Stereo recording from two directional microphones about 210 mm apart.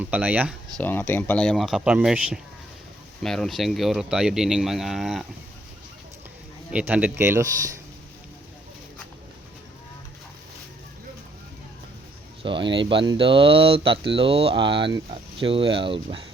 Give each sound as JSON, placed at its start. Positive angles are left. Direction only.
{"t": 0.0, "sound": "speech", "side_deg": -5}
{"t": 0.8, "sound": "speech", "side_deg": 10}
{"t": 6.7, "sound": "speech", "side_deg": -5}
{"t": 12.4, "sound": "speech", "side_deg": -25}